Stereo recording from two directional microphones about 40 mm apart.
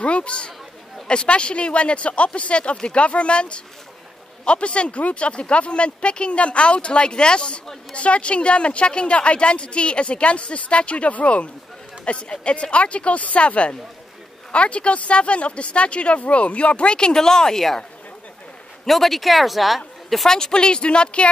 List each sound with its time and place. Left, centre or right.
0.0 s speech: left; by 17.8 s centre
18.9 s speech: centre
20.2 s speech: centre